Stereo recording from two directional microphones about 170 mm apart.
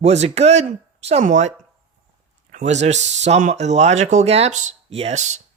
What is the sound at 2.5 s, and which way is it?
Speech, 45° right (ahead or behind).